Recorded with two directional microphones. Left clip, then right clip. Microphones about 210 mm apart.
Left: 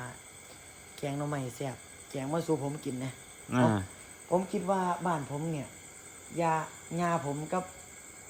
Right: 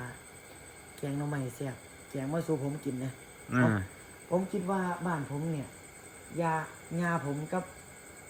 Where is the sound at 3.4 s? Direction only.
15° left (ahead or behind).